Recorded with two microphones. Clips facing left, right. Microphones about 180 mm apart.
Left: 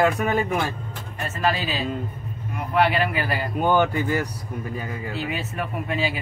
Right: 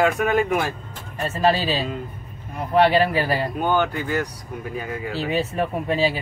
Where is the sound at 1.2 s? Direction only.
30° right (ahead or behind).